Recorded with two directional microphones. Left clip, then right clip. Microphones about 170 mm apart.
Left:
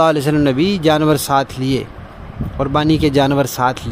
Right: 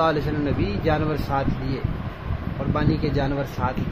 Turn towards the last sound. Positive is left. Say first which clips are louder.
# left 11 dB
turn(degrees=90)